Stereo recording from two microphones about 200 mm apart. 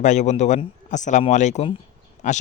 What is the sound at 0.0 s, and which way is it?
Speech, 35° left (ahead or behind).